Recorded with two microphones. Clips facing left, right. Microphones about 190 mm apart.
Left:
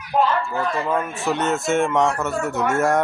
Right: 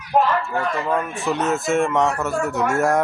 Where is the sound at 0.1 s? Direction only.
65° right (ahead or behind).